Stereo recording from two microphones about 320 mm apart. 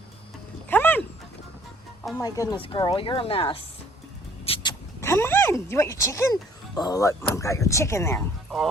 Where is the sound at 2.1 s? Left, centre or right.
Centre.